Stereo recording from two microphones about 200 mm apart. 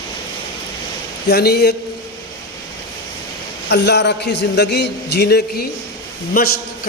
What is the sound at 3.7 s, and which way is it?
A man's voice, 55° left (ahead or behind).